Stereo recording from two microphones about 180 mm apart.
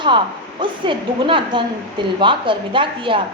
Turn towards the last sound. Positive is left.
turn(degrees=-25)  # may be behind; listen again after turning